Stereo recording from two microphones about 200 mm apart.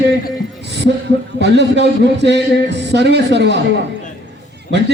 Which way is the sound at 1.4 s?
60° right (ahead or behind).